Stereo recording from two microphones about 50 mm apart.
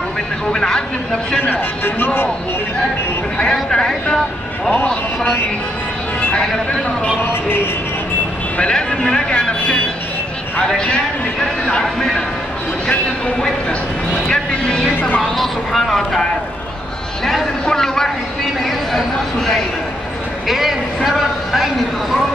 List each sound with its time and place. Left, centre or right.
0.5 s speech: centre
1.4 s speech: left
3.5 s speech: centre
7.2 s speech: left
8.5 s speech: centre
14.2 s a man's voice: centre